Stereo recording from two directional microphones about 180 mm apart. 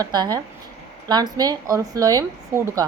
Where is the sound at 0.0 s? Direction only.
25° right (ahead or behind).